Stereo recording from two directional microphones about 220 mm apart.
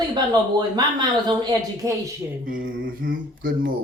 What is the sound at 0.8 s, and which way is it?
Speech, 20° right (ahead or behind).